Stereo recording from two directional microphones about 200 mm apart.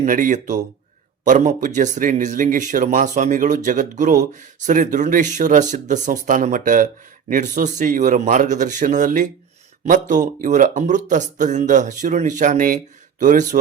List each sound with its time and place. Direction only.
0.0 s speech: 40° right (ahead or behind)